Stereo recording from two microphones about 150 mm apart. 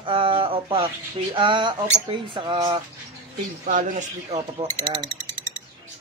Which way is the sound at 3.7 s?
55° right (ahead or behind).